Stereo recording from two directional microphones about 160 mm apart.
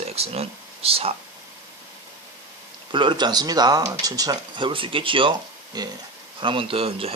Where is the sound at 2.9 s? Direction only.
30° right (ahead or behind).